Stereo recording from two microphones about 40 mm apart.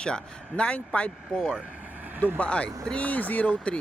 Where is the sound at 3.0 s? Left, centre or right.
Left.